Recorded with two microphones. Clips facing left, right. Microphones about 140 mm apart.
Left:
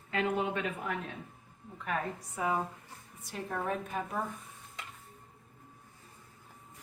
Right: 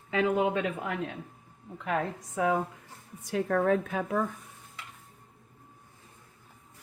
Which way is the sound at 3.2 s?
90° right.